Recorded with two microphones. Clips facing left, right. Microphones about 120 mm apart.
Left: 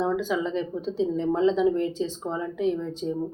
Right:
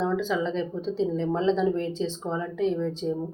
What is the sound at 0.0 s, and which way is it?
Speech, 10° left (ahead or behind).